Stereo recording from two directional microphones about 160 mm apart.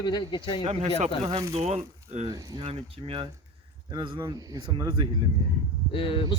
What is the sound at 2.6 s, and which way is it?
Speech, 35° right (ahead or behind).